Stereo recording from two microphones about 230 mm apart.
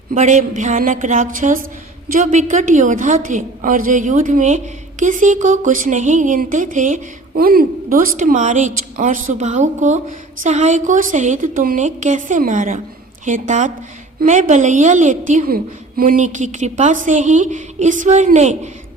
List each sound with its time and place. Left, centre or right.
0.1 s a woman's voice: right